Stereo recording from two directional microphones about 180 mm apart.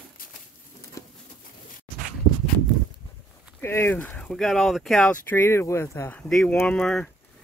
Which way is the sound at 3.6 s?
15° left (ahead or behind).